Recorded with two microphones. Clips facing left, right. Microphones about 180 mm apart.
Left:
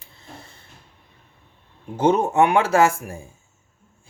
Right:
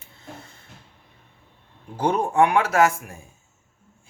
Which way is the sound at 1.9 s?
25° left (ahead or behind).